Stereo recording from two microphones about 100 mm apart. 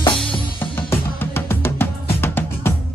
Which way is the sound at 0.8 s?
25° left (ahead or behind).